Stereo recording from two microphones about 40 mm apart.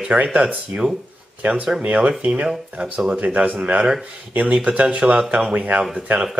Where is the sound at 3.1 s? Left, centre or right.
Right.